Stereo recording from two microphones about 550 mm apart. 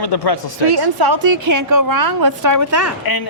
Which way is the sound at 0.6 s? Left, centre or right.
Right.